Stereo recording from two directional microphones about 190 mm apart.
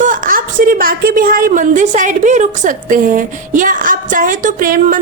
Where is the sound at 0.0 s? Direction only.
45° right (ahead or behind).